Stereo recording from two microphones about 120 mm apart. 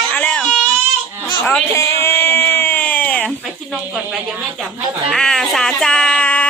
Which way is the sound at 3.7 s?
10° right (ahead or behind).